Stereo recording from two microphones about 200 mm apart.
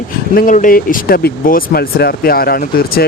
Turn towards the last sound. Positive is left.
turn(degrees=50)  # may be behind; listen again after turning